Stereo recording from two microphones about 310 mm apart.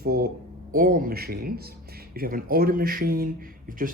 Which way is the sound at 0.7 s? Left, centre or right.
Right.